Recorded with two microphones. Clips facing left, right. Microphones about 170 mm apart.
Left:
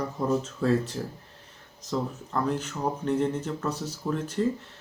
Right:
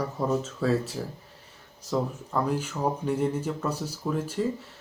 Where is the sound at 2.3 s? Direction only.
10° right (ahead or behind).